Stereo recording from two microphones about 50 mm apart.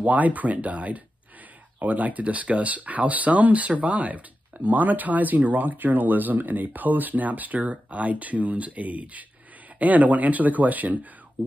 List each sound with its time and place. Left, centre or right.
0.0 s speech: right